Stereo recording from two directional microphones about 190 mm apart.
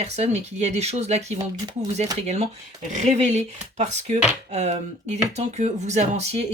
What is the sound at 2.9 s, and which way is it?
Speech, 40° right (ahead or behind).